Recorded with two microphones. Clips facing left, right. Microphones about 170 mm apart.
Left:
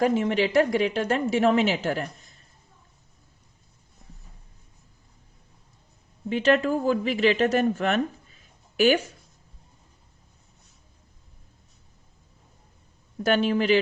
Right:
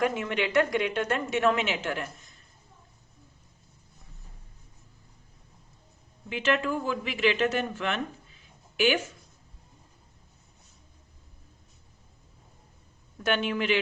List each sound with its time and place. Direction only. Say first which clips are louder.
0.0 s a woman's voice: left 5 dB; 30° left (ahead or behind)
6.2 s a woman's voice: left 6 dB; 40° left (ahead or behind)
13.2 s a woman's voice: left 5 dB; 35° left (ahead or behind)